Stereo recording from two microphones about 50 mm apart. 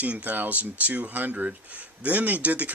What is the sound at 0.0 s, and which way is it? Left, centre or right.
Speech, right.